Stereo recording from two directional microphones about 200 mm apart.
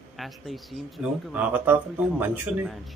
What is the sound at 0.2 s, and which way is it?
A man's voice, centre (ahead or behind).